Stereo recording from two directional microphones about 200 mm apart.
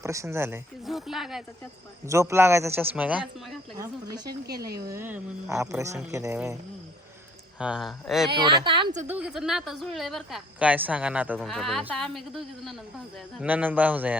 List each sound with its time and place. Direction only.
0.0 s speech: 15° right (ahead or behind)
0.9 s speech: centre (ahead or behind)
2.0 s speech: 15° right (ahead or behind)
3.8 s speech: 20° right (ahead or behind)
4.3 s speech: 50° right (ahead or behind)
4.9 s speech: 10° right (ahead or behind)
7.6 s speech: 5° right (ahead or behind)
8.3 s speech: 25° right (ahead or behind)
9.0 s speech: 10° right (ahead or behind)